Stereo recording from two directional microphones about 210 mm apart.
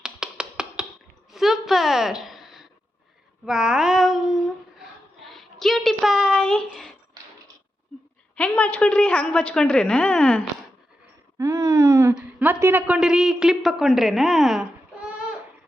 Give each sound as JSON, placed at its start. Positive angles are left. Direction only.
{"t": 0.0, "sound": "tap", "side_deg": -5}
{"t": 1.3, "sound": "a sound", "side_deg": 0}
{"t": 3.4, "sound": "child singing", "side_deg": -5}
{"t": 5.2, "sound": "a sound", "side_deg": 0}
{"t": 7.2, "sound": "mechanisms", "side_deg": -20}
{"t": 8.4, "sound": "a woman's voice", "side_deg": 5}
{"t": 11.3, "sound": "a woman's voice", "side_deg": -15}